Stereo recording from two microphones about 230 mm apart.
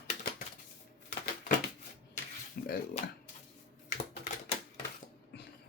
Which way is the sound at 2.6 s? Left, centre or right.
Left.